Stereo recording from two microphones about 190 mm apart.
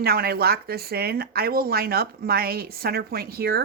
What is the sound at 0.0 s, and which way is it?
Speech, 55° right (ahead or behind).